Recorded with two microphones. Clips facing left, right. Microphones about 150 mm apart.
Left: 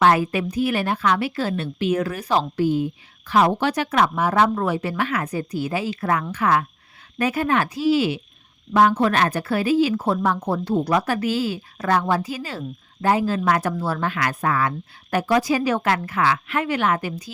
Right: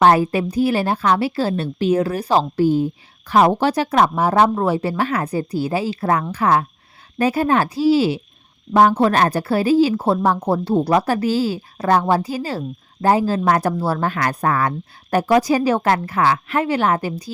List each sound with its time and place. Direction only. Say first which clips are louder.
0.0 s a woman's voice: right 4 dB; 35° right (ahead or behind)